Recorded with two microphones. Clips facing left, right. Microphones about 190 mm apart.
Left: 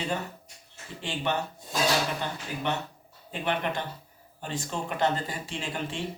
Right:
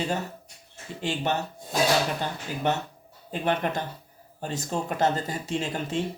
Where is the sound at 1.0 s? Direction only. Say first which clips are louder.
Right 3 dB; 45° right (ahead or behind).